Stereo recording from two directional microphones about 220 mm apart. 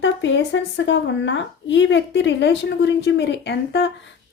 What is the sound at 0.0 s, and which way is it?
Speech, 55° left (ahead or behind).